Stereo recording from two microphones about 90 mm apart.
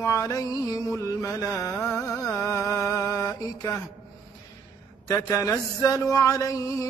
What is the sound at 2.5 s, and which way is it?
Music, 35° left (ahead or behind).